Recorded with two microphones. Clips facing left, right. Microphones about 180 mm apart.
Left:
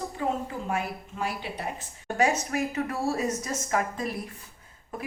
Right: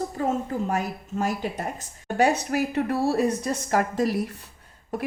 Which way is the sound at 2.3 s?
65° right (ahead or behind).